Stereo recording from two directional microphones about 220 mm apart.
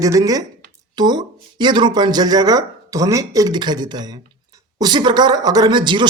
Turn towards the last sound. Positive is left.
turn(degrees=-20)  # may be behind; listen again after turning